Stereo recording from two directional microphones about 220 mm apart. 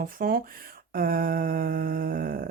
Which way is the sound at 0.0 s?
40° right (ahead or behind).